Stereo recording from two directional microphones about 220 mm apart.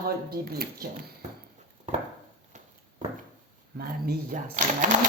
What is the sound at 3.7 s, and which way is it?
Speech, 40° right (ahead or behind).